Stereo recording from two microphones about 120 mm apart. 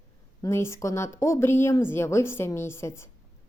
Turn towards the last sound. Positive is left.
turn(degrees=20)  # may be behind; listen again after turning